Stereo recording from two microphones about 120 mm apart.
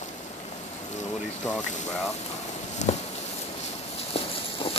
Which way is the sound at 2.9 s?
60° left (ahead or behind).